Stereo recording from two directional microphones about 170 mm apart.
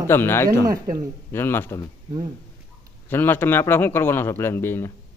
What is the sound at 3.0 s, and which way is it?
A man's voice, 10° left (ahead or behind).